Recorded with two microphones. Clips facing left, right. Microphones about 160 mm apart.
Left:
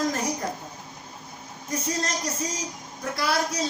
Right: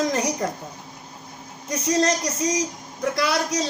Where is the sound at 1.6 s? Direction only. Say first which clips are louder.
Right 7 dB; 80° right.